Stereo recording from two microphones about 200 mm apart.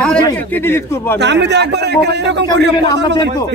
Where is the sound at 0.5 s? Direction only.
10° left (ahead or behind).